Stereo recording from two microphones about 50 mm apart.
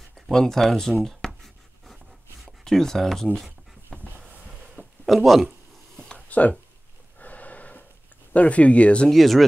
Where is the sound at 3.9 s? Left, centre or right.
Left.